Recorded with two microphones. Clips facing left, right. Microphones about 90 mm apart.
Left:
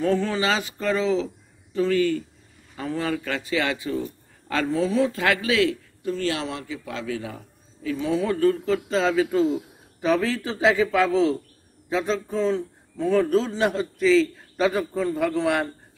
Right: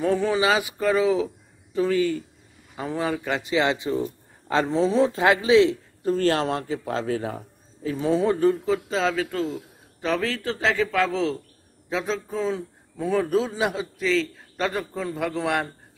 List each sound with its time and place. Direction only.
0.0 s a man's voice: 15° right (ahead or behind)
6.0 s a man's voice: 45° right (ahead or behind); by 8.7 s 20° right (ahead or behind)
8.7 s a man's voice: centre (ahead or behind)